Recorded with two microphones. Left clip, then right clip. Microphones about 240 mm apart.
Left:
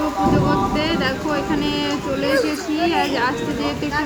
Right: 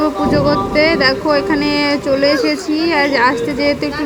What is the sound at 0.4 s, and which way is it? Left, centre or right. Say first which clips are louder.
A woman's voice: right 7 dB; right.